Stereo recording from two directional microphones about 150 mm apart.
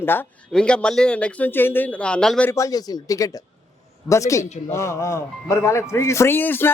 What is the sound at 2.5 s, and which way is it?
A man's voice, 25° left (ahead or behind).